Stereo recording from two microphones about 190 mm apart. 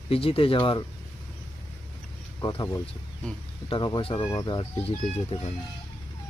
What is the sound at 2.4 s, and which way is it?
Speech, 20° left (ahead or behind).